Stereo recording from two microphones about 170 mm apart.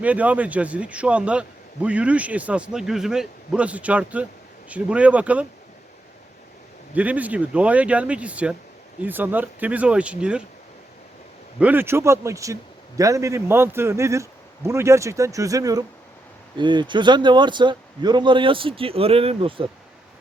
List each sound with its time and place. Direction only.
0.0 s a man's voice: 10° right (ahead or behind)
6.9 s a man's voice: 10° right (ahead or behind)
11.6 s a man's voice: 10° right (ahead or behind); by 19.6 s 30° right (ahead or behind)